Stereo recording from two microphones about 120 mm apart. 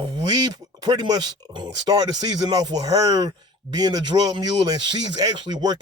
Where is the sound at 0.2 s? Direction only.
35° right (ahead or behind).